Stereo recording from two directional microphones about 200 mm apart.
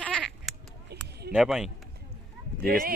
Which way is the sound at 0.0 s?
5° right (ahead or behind).